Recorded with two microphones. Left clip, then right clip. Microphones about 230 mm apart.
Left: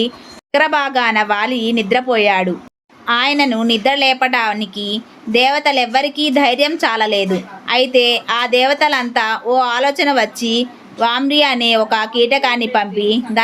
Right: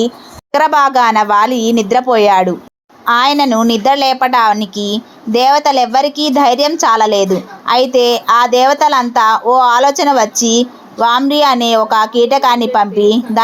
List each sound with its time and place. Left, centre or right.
0.5 s a woman's voice: centre